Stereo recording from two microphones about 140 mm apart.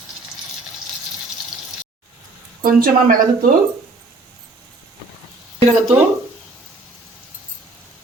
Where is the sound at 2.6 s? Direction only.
90° right.